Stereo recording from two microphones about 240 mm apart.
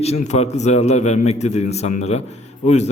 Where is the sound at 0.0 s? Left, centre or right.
Left.